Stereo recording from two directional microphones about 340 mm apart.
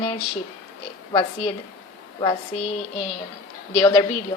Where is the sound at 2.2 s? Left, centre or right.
Centre.